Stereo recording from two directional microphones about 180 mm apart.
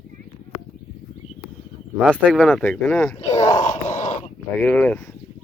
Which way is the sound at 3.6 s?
40° left (ahead or behind).